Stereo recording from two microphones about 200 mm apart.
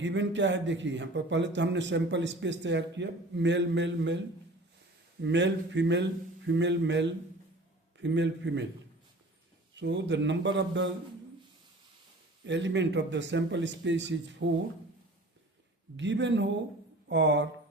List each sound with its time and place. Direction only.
0.0 s a man's voice: 65° right (ahead or behind)
5.2 s a man's voice: 65° right (ahead or behind)
9.8 s a man's voice: 60° right (ahead or behind)
12.5 s a man's voice: 65° right (ahead or behind)
16.0 s a man's voice: 65° right (ahead or behind)